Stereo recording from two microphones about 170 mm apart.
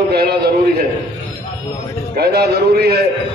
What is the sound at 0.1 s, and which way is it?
Speech, 70° right (ahead or behind).